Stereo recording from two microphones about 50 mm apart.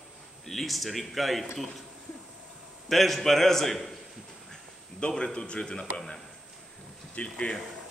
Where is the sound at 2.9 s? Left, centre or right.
Centre.